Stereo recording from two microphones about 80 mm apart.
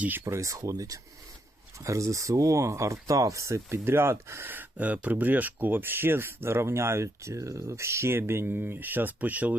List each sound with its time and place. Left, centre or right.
0.3 s speech: right
4.4 s speech: right